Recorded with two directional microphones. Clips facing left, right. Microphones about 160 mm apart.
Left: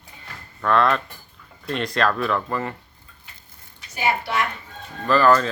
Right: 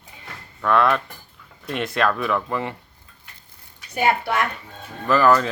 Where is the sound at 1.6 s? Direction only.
5° right (ahead or behind).